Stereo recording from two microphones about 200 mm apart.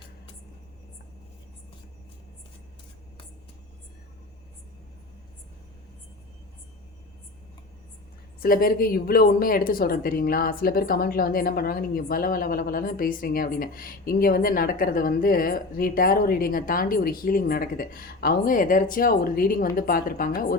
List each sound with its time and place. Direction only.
8.4 s speech: 45° left (ahead or behind)